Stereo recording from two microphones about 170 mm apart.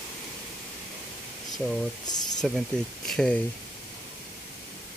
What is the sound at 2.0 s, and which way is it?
Speech, 25° left (ahead or behind).